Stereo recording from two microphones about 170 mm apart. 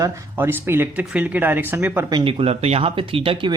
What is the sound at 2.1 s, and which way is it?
Speech, 30° right (ahead or behind).